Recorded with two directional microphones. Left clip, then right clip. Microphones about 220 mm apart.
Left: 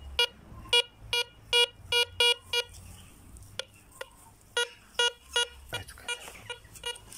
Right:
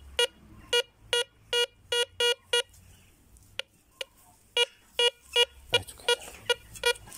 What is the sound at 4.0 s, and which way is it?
Beep, 45° right (ahead or behind).